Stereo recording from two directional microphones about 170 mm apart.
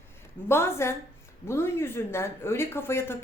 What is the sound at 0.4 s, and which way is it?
Speech, 15° left (ahead or behind).